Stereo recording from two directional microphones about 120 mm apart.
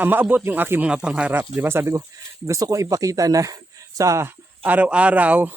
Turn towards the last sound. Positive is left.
turn(degrees=-15)  # may be behind; listen again after turning